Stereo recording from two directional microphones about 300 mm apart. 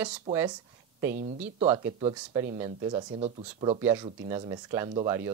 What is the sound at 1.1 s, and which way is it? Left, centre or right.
Speech, right.